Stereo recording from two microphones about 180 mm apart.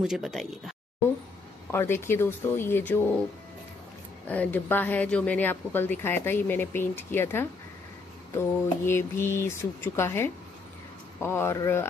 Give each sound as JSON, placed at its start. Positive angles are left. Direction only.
{"t": 0.0, "sound": "speech", "side_deg": 0}
{"t": 1.7, "sound": "speech", "side_deg": 15}
{"t": 4.3, "sound": "speech", "side_deg": 10}